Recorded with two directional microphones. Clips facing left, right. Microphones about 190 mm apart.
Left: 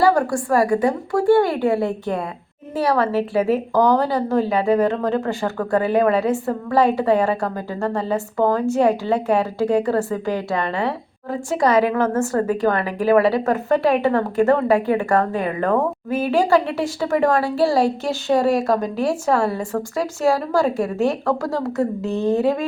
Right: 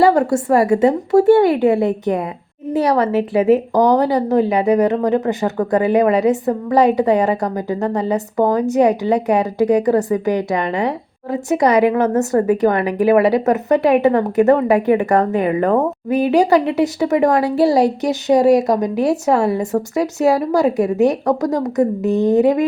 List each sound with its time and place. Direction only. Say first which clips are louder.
0.0 s a woman's voice: right 4 dB; 20° right (ahead or behind)